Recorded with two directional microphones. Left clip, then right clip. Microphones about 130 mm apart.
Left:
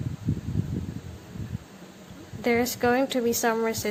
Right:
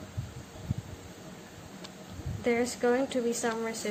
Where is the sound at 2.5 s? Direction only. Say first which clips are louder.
Left 4 dB; 60° left (ahead or behind).